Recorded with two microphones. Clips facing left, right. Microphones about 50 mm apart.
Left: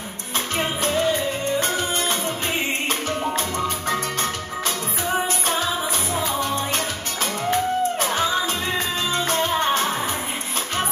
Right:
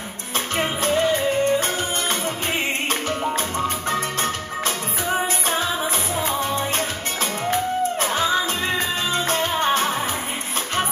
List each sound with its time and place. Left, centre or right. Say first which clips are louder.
0.6 s music: right 2 dB; right
3.6 s music: right 1 dB; right
9.1 s music: left 2 dB; right